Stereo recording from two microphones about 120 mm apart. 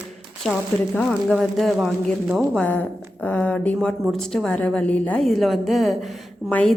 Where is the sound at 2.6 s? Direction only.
15° left (ahead or behind).